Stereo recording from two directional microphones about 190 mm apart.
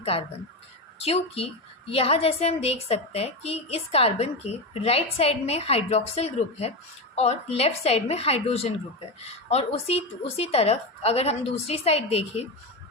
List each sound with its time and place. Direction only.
0.0 s a woman's voice: 30° left (ahead or behind)